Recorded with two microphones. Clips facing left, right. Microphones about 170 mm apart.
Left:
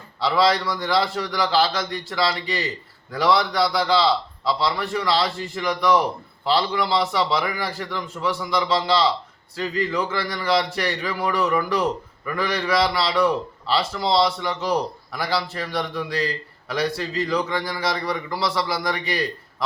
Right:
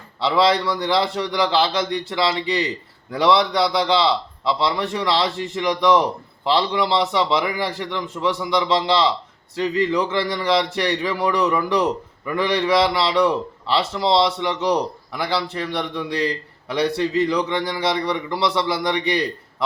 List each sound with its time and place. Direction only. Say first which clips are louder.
0.2 s speech: right 2 dB; 25° right (ahead or behind)